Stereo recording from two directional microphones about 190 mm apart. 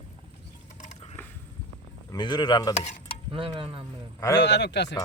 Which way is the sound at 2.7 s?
40° left (ahead or behind).